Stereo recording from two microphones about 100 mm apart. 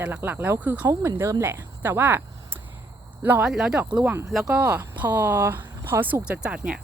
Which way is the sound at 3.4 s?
5° right (ahead or behind).